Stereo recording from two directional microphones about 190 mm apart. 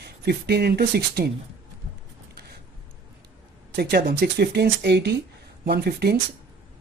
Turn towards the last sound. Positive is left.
turn(degrees=-55)  # may be behind; listen again after turning